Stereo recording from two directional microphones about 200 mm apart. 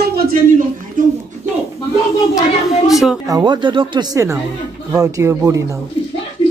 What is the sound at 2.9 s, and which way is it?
Speech, centre (ahead or behind).